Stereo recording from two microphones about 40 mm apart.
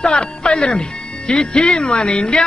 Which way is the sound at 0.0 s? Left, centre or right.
Left.